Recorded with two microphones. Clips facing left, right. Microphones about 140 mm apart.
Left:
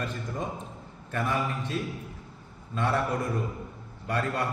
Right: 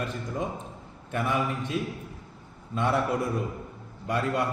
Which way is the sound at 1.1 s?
15° right (ahead or behind).